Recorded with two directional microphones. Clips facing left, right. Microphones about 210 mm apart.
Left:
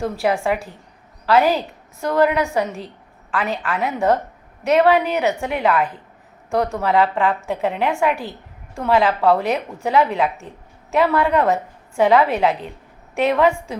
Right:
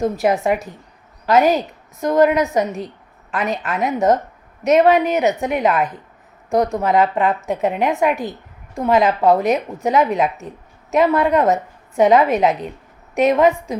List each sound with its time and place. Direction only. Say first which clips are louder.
0.0 s a woman's voice: right 3 dB; 20° right (ahead or behind)